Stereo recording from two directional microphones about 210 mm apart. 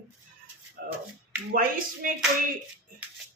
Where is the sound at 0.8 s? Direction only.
45° right (ahead or behind).